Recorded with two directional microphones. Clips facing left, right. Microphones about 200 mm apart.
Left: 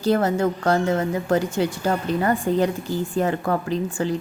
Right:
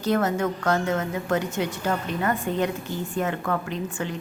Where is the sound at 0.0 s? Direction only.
30° left (ahead or behind).